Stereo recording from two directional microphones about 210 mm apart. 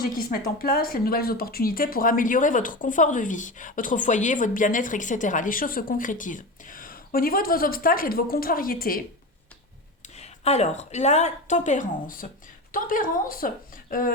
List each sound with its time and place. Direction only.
0.0 s speech: 45° left (ahead or behind)
10.2 s speech: 30° left (ahead or behind)